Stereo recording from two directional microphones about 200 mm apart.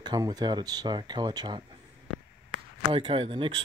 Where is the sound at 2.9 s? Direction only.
25° right (ahead or behind).